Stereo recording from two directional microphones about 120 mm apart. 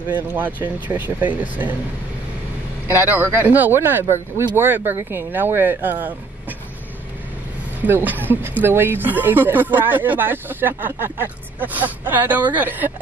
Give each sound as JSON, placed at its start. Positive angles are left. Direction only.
{"t": 0.1, "sound": "speech", "side_deg": -15}
{"t": 2.9, "sound": "speech", "side_deg": -20}
{"t": 7.8, "sound": "speech", "side_deg": -15}